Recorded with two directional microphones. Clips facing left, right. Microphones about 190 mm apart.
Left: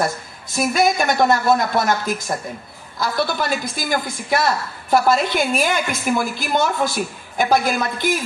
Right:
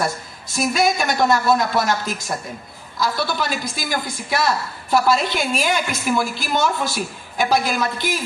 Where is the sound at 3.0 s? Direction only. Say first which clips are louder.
Left 1 dB; 55° left (ahead or behind).